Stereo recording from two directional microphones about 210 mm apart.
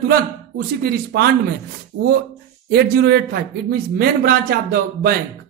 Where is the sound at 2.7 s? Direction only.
50° right (ahead or behind).